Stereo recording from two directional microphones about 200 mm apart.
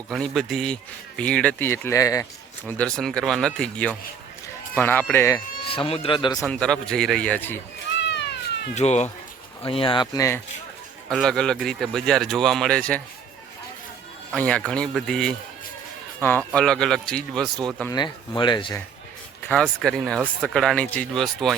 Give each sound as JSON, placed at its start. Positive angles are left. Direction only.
{"t": 0.1, "sound": "speech", "side_deg": 0}
{"t": 2.6, "sound": "speech", "side_deg": 5}
{"t": 5.6, "sound": "speech", "side_deg": 25}
{"t": 6.4, "sound": "speech", "side_deg": 5}
{"t": 8.0, "sound": "cat", "side_deg": 60}
{"t": 8.7, "sound": "speech", "side_deg": 35}
{"t": 11.1, "sound": "speech", "side_deg": 0}
{"t": 14.3, "sound": "speech", "side_deg": 5}
{"t": 17.9, "sound": "speech", "side_deg": 20}
{"t": 19.4, "sound": "speech", "side_deg": 5}